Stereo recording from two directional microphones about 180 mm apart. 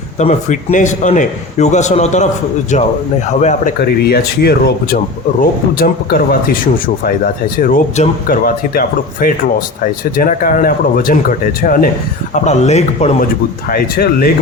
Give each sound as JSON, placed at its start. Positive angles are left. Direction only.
{"t": 0.2, "sound": "a man's voice", "side_deg": 40}
{"t": 3.4, "sound": "speech", "side_deg": 45}
{"t": 6.5, "sound": "speech", "side_deg": 50}
{"t": 12.3, "sound": "a man's voice", "side_deg": 40}
{"t": 13.7, "sound": "speech", "side_deg": 55}